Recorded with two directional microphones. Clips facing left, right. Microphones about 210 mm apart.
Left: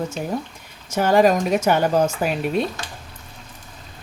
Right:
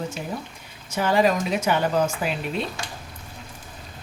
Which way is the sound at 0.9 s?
45° left (ahead or behind).